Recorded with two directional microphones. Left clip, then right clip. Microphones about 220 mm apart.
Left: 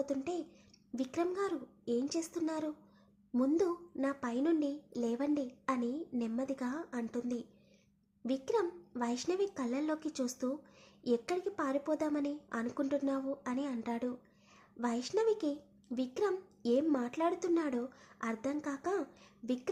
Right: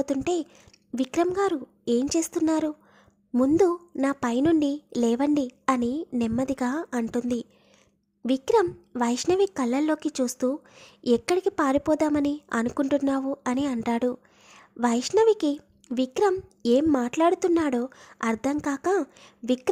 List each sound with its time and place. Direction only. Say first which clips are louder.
0.0 s a child's voice: right 11 dB; 40° right (ahead or behind)